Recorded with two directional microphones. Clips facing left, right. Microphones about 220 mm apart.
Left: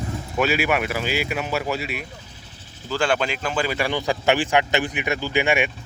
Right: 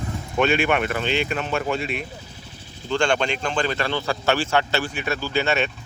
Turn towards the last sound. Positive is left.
turn(degrees=15)  # may be behind; listen again after turning